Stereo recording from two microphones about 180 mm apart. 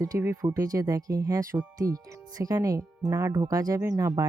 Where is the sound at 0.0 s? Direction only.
15° right (ahead or behind).